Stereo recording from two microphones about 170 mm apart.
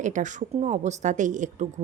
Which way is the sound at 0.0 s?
45° right (ahead or behind).